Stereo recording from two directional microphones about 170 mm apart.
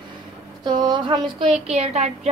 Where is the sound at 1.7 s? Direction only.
40° right (ahead or behind).